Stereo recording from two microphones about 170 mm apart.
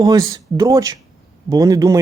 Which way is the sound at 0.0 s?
20° right (ahead or behind).